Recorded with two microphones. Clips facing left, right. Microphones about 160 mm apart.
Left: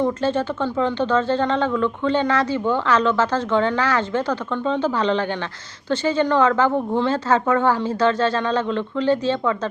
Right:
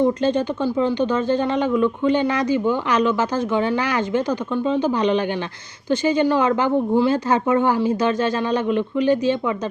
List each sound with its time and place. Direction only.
0.0 s speech: 15° right (ahead or behind)